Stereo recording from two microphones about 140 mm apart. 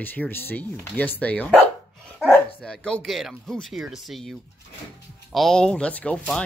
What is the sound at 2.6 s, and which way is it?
Speech, 5° left (ahead or behind).